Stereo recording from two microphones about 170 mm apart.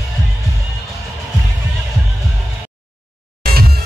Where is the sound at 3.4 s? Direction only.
60° right (ahead or behind).